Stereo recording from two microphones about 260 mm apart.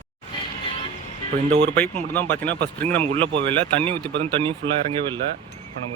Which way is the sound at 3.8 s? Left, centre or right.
Centre.